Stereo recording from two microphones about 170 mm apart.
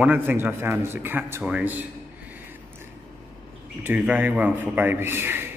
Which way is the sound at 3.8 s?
10° right (ahead or behind).